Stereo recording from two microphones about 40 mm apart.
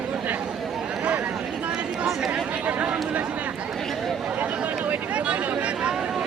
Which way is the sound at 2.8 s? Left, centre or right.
Right.